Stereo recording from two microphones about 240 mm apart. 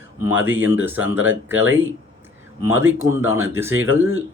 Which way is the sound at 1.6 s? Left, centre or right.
Right.